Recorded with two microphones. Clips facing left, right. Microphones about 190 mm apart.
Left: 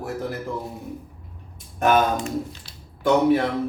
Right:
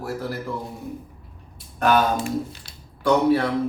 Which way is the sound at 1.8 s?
20° left (ahead or behind).